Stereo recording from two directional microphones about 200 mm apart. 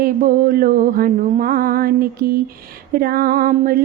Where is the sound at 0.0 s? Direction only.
45° right (ahead or behind).